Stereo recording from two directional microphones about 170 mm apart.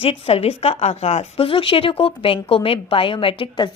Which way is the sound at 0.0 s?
35° left (ahead or behind).